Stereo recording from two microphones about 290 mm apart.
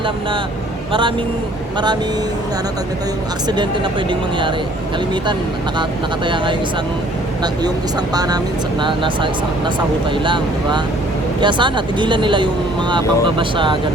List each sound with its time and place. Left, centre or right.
6.2 s speech: centre
8.1 s speech: centre